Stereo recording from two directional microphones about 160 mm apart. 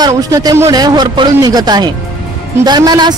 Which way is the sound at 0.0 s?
20° right (ahead or behind).